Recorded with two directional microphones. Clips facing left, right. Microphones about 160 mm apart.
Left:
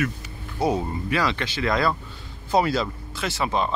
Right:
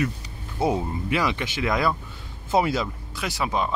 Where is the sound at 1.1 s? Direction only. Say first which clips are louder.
Even; 15° right (ahead or behind).